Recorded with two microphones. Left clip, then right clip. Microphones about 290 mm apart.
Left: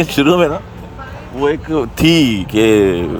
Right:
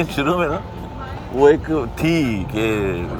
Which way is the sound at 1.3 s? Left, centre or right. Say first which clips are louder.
Right 2 dB; centre.